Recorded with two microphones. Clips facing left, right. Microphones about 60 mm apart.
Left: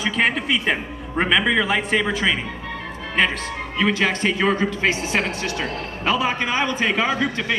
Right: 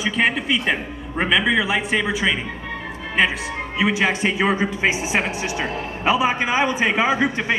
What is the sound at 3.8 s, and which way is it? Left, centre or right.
Speech, centre.